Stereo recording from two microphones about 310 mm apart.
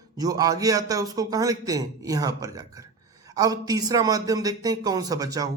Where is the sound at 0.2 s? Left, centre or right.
Centre.